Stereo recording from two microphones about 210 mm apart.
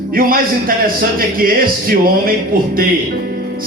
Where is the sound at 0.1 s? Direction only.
45° right (ahead or behind).